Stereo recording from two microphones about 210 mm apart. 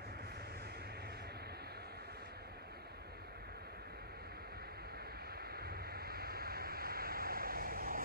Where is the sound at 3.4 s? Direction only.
50° right (ahead or behind).